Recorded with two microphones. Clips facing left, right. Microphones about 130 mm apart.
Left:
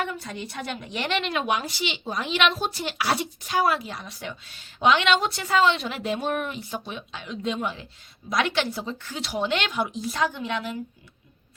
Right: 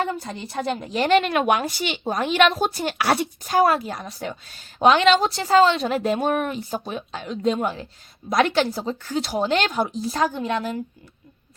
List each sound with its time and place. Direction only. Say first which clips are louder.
0.0 s a woman's voice: right 4 dB; 30° right (ahead or behind)
1.0 s a woman's voice: right 8 dB; 50° right (ahead or behind)